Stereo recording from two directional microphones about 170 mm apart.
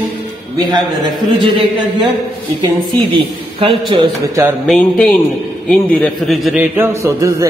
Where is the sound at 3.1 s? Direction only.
30° right (ahead or behind).